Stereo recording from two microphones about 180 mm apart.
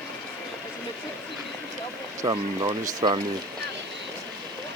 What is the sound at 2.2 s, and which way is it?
Speech, 25° right (ahead or behind).